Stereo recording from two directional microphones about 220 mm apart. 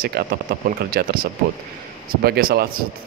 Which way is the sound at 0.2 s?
45° right (ahead or behind).